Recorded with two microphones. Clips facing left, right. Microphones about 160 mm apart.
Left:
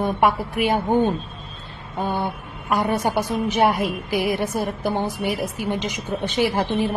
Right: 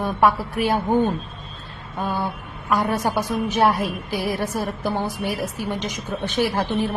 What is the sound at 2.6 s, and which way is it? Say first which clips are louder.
A woman's voice: even; 15° left (ahead or behind).